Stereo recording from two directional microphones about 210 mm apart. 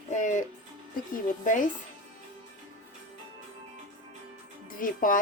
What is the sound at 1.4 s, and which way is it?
Speech, 35° left (ahead or behind).